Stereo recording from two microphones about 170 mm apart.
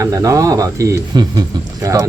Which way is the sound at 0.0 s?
20° right (ahead or behind).